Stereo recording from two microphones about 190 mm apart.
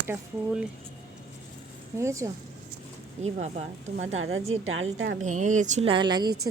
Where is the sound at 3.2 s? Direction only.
35° right (ahead or behind).